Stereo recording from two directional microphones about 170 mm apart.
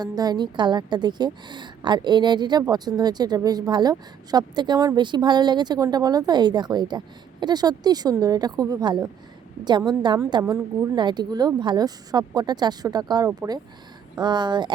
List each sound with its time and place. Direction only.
0.2 s a woman's voice: 25° right (ahead or behind)
10.4 s speech: 15° right (ahead or behind)
10.9 s a woman's voice: 25° right (ahead or behind)